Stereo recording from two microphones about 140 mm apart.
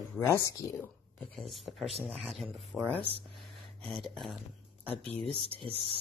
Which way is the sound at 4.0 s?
Centre (ahead or behind).